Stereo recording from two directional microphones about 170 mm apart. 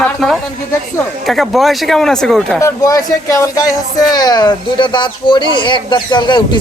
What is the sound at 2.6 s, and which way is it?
Speech, 20° left (ahead or behind).